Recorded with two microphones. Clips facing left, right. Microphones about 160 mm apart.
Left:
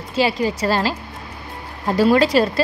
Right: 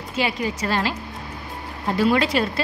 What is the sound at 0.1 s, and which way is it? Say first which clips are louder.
Speech: left 5 dB; 30° left (ahead or behind).